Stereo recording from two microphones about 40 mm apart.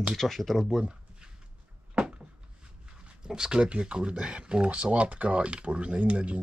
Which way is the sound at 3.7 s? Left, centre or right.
Right.